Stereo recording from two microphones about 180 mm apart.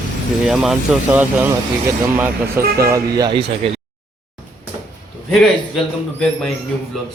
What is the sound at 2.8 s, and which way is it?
Speech, 20° right (ahead or behind).